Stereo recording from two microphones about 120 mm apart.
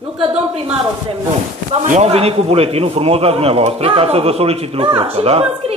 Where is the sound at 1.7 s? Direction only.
55° right (ahead or behind).